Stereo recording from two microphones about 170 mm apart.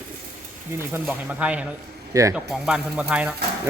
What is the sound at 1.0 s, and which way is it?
Speech, 5° right (ahead or behind).